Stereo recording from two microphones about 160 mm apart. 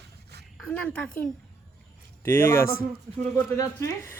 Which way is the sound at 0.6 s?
5° left (ahead or behind).